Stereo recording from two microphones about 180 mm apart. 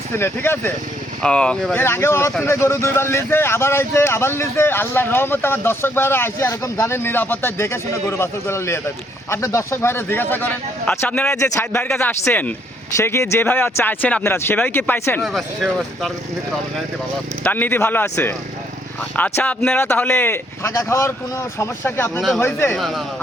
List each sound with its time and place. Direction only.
0.2 s speech: 15° left (ahead or behind)
15.2 s speech: centre (ahead or behind)
17.4 s speech: 10° left (ahead or behind)
22.8 s speech: centre (ahead or behind)